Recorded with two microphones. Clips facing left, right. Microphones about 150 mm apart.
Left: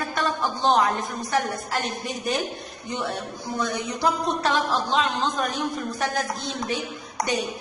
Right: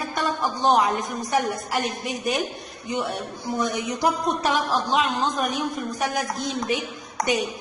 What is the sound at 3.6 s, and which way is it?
Speech, 15° right (ahead or behind).